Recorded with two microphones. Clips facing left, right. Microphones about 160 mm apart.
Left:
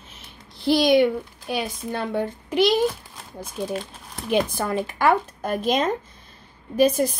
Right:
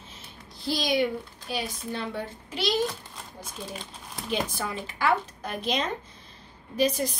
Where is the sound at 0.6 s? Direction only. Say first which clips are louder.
Left 9 dB; 60° left (ahead or behind).